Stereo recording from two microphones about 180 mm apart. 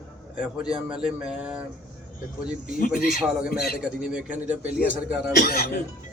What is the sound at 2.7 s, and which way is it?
Speech, 50° left (ahead or behind).